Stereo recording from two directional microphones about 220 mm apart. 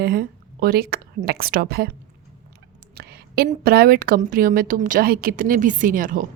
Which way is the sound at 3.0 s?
45° right (ahead or behind).